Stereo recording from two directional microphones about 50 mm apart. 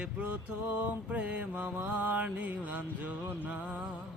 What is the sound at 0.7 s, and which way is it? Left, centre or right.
Mantra, right.